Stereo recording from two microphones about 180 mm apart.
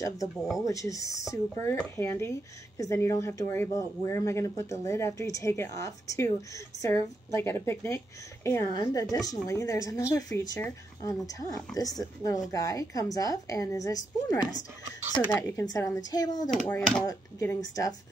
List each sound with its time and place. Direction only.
0.7 s a woman's voice: 15° left (ahead or behind)
15.4 s a woman's voice: 20° left (ahead or behind)
16.4 s speech: 5° left (ahead or behind)
17.0 s a woman's voice: 20° left (ahead or behind)